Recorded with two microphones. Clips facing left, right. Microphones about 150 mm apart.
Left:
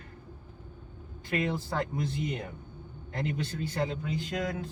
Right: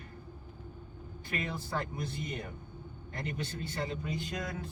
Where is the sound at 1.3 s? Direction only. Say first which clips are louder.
Left 6 dB; 90° left.